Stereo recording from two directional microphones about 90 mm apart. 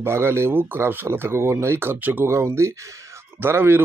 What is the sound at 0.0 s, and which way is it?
Speech, 30° right (ahead or behind).